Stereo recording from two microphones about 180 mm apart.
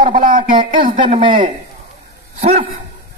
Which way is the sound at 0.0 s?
50° right (ahead or behind).